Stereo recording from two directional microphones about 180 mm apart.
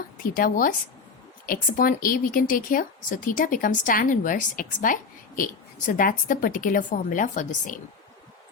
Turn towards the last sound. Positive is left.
turn(degrees=45)  # may be behind; listen again after turning